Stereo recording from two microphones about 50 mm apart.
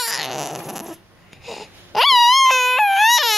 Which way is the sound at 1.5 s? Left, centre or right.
Centre.